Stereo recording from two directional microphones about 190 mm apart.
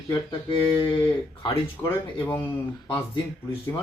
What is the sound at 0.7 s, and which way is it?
Speech, 25° left (ahead or behind).